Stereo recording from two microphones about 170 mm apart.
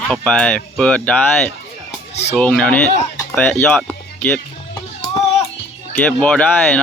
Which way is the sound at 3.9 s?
10° left (ahead or behind).